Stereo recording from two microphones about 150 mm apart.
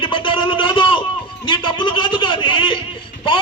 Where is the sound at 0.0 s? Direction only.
35° left (ahead or behind).